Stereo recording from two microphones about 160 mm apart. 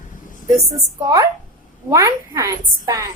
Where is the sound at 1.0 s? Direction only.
25° right (ahead or behind).